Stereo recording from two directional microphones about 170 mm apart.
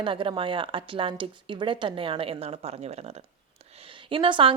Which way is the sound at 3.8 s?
30° right (ahead or behind).